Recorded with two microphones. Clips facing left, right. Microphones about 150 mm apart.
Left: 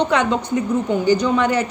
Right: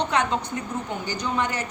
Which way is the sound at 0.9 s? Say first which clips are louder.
Left 12 dB; 90° left.